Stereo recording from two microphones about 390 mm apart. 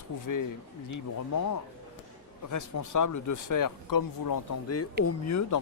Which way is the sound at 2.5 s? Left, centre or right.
Left.